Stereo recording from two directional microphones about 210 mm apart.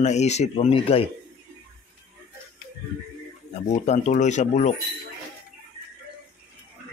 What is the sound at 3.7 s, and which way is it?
Speech, 35° left (ahead or behind).